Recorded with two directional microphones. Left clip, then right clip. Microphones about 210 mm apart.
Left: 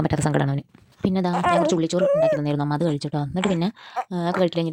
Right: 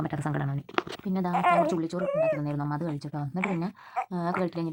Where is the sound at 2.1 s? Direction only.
60° left (ahead or behind).